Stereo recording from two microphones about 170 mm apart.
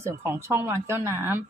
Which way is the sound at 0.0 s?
15° right (ahead or behind).